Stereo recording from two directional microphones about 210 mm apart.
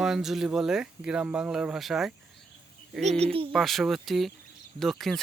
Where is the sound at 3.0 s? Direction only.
30° right (ahead or behind).